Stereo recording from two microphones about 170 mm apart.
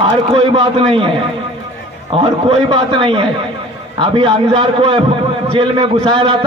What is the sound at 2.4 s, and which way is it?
A man's voice, 30° right (ahead or behind).